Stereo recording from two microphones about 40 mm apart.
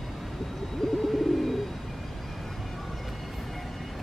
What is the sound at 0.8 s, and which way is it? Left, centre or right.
Bird, centre.